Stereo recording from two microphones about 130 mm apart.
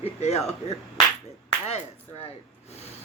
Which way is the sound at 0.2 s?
55° left (ahead or behind).